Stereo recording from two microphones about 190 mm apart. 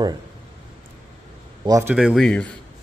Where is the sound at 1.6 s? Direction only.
20° right (ahead or behind).